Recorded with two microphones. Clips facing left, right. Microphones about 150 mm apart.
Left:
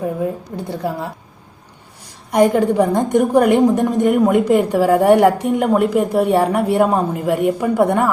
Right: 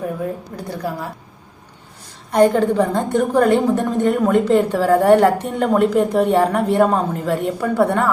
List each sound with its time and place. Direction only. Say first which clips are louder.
0.0 s a woman's voice: left 3 dB; 20° left (ahead or behind)
2.3 s a woman's voice: even; 10° left (ahead or behind)